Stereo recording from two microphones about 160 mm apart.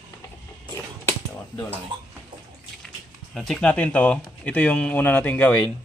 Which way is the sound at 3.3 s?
5° left (ahead or behind).